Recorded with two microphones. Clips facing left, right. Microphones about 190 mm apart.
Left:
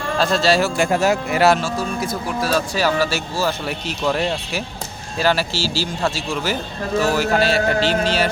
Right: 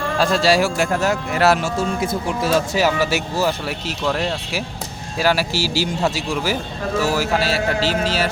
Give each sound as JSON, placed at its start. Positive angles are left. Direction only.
{"t": 0.2, "sound": "speech", "side_deg": -10}
{"t": 0.9, "sound": "speech", "side_deg": 10}
{"t": 1.6, "sound": "speech", "side_deg": -25}
{"t": 3.7, "sound": "speech", "side_deg": 0}